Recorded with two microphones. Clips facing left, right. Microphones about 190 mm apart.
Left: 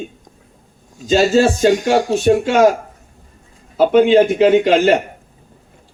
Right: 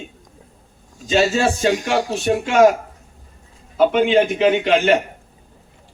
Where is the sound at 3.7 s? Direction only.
35° left (ahead or behind).